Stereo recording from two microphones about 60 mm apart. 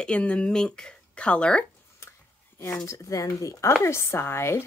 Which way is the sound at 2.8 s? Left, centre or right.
Left.